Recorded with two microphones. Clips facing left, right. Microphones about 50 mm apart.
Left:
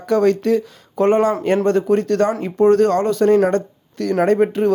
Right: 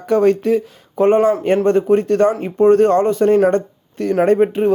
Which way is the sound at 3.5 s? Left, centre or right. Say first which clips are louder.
Right 2 dB; right.